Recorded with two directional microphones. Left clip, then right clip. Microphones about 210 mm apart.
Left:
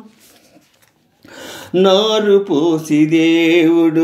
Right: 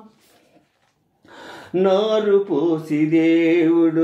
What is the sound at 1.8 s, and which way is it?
Mantra, 35° left (ahead or behind).